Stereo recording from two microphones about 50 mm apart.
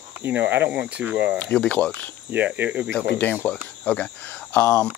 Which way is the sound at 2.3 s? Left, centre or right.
Right.